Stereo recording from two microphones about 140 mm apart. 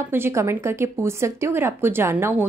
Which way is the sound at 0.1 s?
15° right (ahead or behind).